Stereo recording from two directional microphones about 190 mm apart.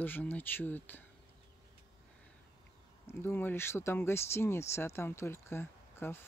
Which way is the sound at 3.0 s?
10° left (ahead or behind).